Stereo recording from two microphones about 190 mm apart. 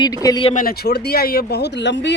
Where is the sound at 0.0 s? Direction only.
20° left (ahead or behind).